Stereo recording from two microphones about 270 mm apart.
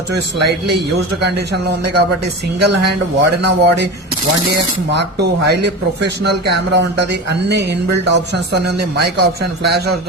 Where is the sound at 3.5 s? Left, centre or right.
Right.